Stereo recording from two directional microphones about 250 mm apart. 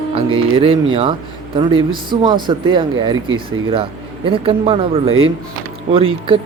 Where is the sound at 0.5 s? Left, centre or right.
Right.